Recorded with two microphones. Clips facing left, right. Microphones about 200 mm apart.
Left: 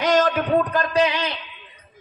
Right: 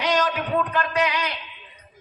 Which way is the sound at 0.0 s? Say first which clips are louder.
Left 4 dB; 50° left (ahead or behind).